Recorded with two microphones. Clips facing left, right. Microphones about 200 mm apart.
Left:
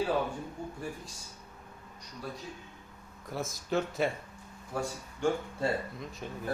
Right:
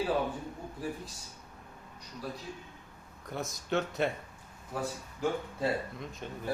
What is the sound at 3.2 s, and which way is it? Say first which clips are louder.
Speech: left 1 dB; centre (ahead or behind).